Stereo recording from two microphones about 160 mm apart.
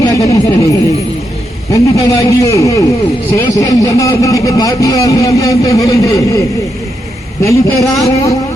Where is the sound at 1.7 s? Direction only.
20° left (ahead or behind).